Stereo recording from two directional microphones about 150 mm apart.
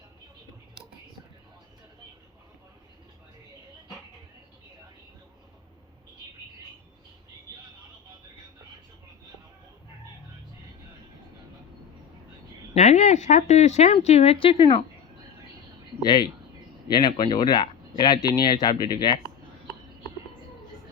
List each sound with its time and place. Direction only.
12.7 s speech: 50° left (ahead or behind)
16.0 s speech: 30° left (ahead or behind)